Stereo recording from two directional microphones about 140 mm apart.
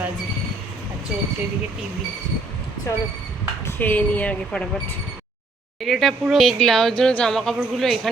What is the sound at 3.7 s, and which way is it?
Speech, 15° left (ahead or behind).